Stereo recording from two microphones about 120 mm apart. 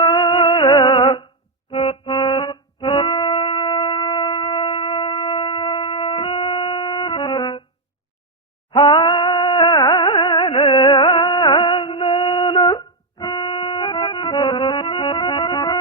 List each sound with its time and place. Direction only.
0.0 s a sound: 40° left (ahead or behind)
1.7 s music: 50° left (ahead or behind)
8.7 s music: 40° left (ahead or behind)